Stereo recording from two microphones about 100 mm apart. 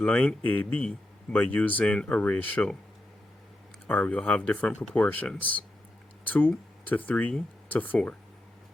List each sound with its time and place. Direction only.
0.0 s speech: 10° left (ahead or behind)
3.8 s speech: 15° left (ahead or behind)